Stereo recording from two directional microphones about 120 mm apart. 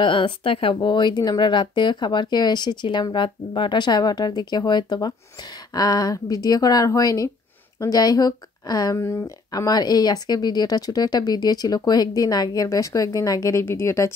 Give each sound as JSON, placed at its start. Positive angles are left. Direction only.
{"t": 0.0, "sound": "speech", "side_deg": 45}